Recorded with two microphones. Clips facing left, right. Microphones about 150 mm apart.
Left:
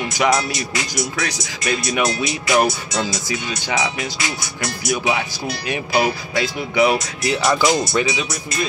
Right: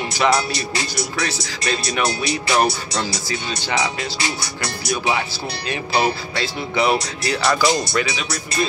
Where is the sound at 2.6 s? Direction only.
20° left (ahead or behind).